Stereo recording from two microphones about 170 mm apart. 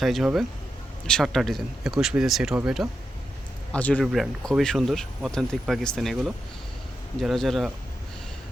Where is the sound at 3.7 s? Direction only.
10° left (ahead or behind).